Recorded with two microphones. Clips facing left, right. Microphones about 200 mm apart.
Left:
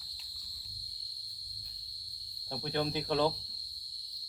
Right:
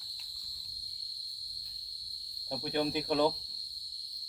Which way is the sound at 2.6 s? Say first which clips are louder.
Right 1 dB; 15° right (ahead or behind).